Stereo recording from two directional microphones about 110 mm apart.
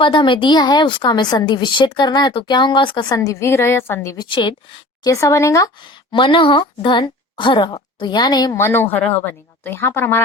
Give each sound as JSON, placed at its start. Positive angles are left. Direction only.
{"t": 0.0, "sound": "a woman's voice", "side_deg": 50}
{"t": 3.2, "sound": "speech", "side_deg": 25}
{"t": 4.2, "sound": "a woman's voice", "side_deg": 45}
{"t": 5.0, "sound": "speech", "side_deg": 30}
{"t": 6.1, "sound": "a woman's voice", "side_deg": 50}
{"t": 8.5, "sound": "speech", "side_deg": 20}